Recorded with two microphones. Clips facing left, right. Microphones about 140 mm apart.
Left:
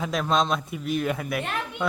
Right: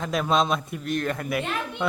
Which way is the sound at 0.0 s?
Centre (ahead or behind).